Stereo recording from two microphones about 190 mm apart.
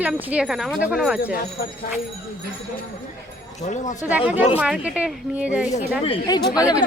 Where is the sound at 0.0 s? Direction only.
5° right (ahead or behind).